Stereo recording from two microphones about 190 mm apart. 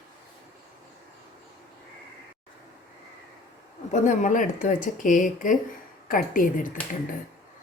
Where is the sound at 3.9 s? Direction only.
40° left (ahead or behind).